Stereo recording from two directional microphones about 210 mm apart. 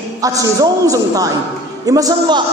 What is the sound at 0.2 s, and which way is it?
A man's voice, 15° right (ahead or behind).